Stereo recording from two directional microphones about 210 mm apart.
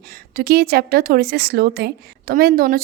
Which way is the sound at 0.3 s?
45° right (ahead or behind).